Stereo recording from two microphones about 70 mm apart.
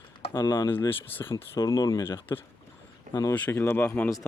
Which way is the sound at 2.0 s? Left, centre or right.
Left.